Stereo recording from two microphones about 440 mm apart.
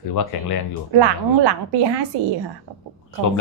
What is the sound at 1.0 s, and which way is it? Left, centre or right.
Speech, right.